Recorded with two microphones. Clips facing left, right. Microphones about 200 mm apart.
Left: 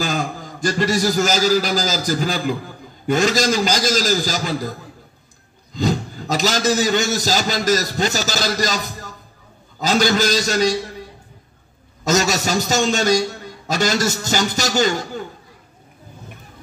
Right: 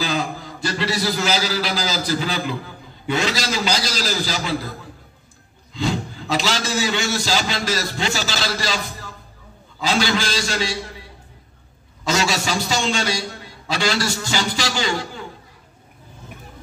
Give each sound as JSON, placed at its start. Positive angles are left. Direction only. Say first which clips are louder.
{"t": 0.0, "sound": "a man's voice", "louder": "left 1 dB", "side_deg": 45}